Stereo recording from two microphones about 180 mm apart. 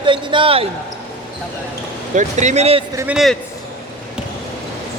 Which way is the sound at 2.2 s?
40° right (ahead or behind).